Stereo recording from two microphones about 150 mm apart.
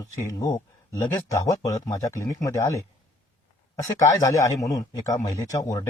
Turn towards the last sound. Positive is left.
turn(degrees=20)  # may be behind; listen again after turning